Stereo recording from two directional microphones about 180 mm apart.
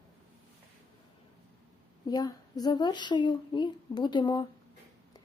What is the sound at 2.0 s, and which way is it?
Speech, 20° left (ahead or behind).